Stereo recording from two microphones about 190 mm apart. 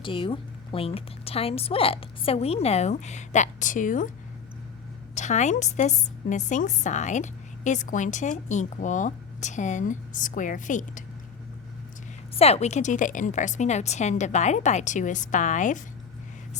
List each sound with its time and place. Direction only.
0.0 s a woman's voice: 25° left (ahead or behind); by 4.1 s 45° left (ahead or behind)
5.1 s a woman's voice: 40° left (ahead or behind)
12.4 s a woman's voice: 35° left (ahead or behind)